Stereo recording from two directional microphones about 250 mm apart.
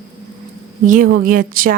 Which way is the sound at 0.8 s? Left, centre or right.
Right.